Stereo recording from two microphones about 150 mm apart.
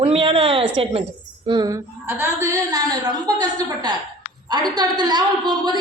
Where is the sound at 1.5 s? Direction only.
25° right (ahead or behind).